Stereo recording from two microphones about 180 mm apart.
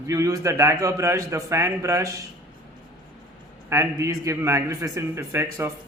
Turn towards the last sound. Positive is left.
turn(degrees=-15)  # may be behind; listen again after turning